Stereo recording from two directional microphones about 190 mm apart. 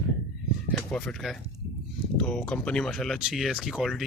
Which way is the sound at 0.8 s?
5° left (ahead or behind).